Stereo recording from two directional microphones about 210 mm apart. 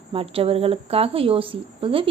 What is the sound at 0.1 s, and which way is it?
Speech, 25° right (ahead or behind).